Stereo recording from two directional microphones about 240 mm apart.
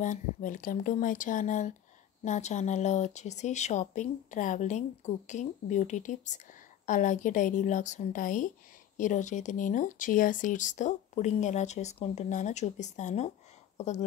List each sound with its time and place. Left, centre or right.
0.0 s speech: left